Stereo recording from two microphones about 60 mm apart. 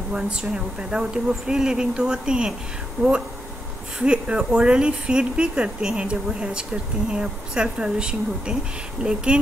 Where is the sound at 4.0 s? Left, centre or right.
Centre.